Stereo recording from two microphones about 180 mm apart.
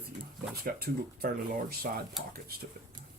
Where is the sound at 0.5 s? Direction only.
55° right (ahead or behind).